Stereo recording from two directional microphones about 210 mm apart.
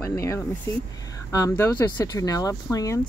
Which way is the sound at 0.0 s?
15° left (ahead or behind).